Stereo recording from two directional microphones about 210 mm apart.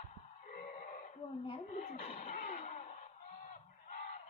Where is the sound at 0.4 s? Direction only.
40° left (ahead or behind).